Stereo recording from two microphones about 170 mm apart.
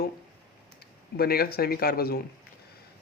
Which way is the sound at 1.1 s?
65° left (ahead or behind).